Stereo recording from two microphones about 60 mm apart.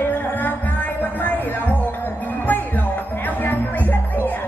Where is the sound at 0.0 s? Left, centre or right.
Left.